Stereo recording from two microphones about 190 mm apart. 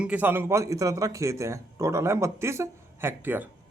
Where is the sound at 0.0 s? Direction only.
10° right (ahead or behind).